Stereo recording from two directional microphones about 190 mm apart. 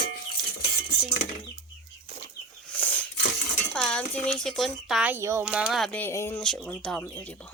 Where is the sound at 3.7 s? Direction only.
5° left (ahead or behind).